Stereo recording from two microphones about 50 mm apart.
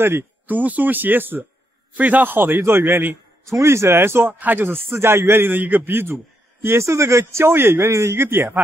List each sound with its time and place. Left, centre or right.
0.5 s a man's voice: right
3.4 s speech: right
4.3 s speech: right
4.9 s speech: right
5.6 s speech: right
6.8 s speech: right